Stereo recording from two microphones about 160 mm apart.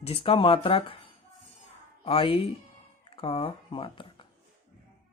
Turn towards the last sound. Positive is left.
turn(degrees=35)  # may be behind; listen again after turning